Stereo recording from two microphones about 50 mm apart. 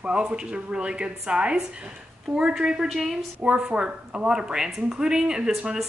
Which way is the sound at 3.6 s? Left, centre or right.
Centre.